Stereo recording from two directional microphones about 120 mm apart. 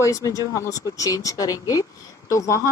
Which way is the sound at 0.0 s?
30° left (ahead or behind).